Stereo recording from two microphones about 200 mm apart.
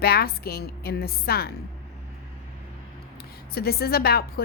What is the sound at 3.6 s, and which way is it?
Speech, 50° left (ahead or behind).